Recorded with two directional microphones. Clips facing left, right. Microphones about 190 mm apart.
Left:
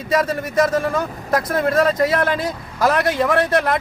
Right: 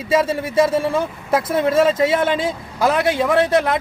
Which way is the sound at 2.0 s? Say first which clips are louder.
Right 1 dB; 25° right (ahead or behind).